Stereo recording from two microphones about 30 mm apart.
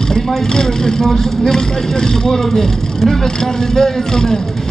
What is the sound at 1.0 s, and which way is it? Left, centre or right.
Speech, centre.